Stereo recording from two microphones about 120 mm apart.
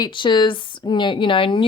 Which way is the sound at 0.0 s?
40° left (ahead or behind).